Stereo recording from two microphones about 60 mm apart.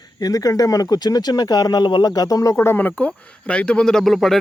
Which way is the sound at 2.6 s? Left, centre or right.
Left.